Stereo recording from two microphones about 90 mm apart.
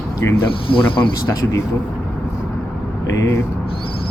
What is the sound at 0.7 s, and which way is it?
Speech, 70° left (ahead or behind).